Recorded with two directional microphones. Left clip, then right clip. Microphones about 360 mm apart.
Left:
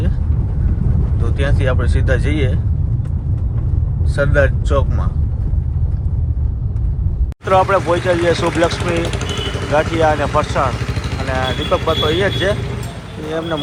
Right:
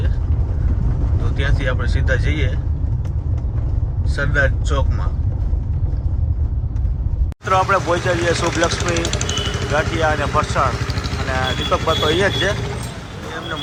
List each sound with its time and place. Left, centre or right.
1.4 s speech: centre
4.1 s speech: centre
7.4 s speech: centre
9.0 s speech: centre
9.7 s speech: centre